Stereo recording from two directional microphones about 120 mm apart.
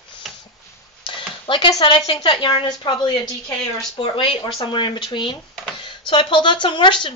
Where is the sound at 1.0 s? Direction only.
45° left (ahead or behind).